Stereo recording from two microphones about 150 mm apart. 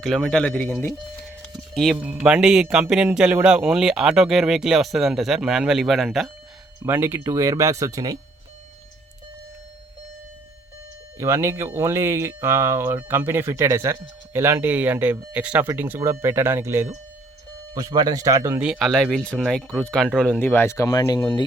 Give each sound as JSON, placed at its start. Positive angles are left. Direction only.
{"t": 0.0, "sound": "speech", "side_deg": 0}
{"t": 1.2, "sound": "a sound", "side_deg": 5}
{"t": 2.0, "sound": "speech", "side_deg": -10}
{"t": 6.7, "sound": "speech", "side_deg": -15}
{"t": 11.2, "sound": "speech", "side_deg": -15}
{"t": 18.6, "sound": "speech", "side_deg": 0}
{"t": 20.4, "sound": "speech", "side_deg": 15}